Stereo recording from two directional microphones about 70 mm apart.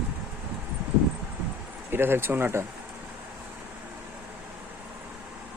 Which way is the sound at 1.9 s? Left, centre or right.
Right.